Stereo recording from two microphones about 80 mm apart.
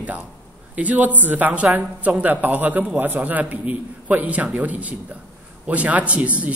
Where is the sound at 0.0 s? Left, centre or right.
Centre.